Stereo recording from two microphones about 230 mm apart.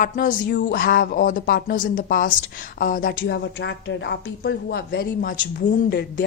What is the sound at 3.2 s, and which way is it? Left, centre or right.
Speech, left.